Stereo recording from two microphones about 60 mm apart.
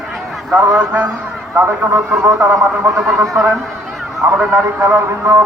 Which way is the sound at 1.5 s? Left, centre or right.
Right.